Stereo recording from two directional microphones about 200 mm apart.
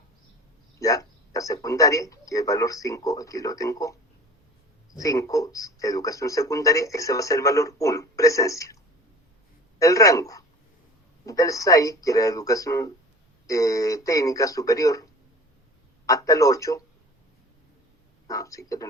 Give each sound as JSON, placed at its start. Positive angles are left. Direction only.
{"t": 0.8, "sound": "a man's voice", "side_deg": 15}
{"t": 5.0, "sound": "speech", "side_deg": 15}
{"t": 16.0, "sound": "speech", "side_deg": 15}
{"t": 18.3, "sound": "speech", "side_deg": 15}